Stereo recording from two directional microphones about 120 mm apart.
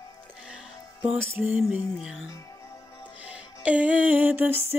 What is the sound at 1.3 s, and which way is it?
Music, 15° right (ahead or behind).